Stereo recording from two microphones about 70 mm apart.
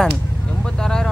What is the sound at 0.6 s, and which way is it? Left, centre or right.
Vehicle, centre.